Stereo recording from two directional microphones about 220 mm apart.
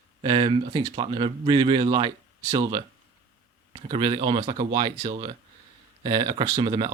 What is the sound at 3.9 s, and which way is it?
Speech, 20° right (ahead or behind).